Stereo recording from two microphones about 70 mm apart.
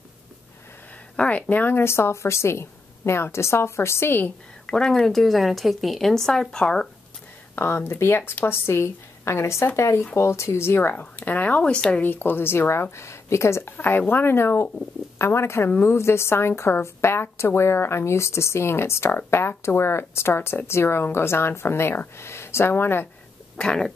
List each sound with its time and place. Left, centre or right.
1.1 s a woman's voice: centre
4.6 s speech: centre
7.5 s a woman's voice: left; by 12.0 s centre
12.0 s a woman's voice: left
23.6 s a sound: centre